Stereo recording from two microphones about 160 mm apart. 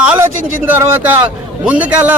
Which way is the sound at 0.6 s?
15° right (ahead or behind).